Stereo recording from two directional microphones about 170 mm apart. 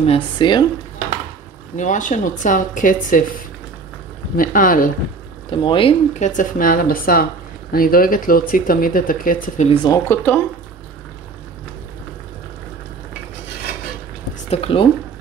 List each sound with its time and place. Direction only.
0.0 s speech: 30° left (ahead or behind)
1.8 s speech: 50° left (ahead or behind)
4.4 s speech: 55° left (ahead or behind)
5.5 s speech: 30° left (ahead or behind)
6.1 s speech: 45° left (ahead or behind)
9.8 s speech: 15° left (ahead or behind)
14.5 s speech: 35° left (ahead or behind)